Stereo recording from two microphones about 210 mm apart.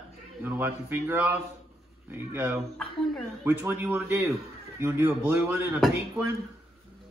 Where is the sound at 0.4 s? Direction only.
10° right (ahead or behind).